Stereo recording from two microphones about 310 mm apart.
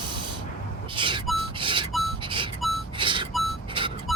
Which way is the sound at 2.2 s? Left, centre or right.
Centre.